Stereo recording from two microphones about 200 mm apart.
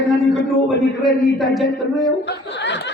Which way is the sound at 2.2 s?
60° left (ahead or behind).